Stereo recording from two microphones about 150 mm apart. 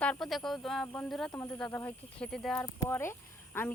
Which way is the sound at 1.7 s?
20° left (ahead or behind).